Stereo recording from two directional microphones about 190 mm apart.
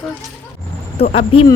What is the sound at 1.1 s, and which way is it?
Speech, 30° left (ahead or behind).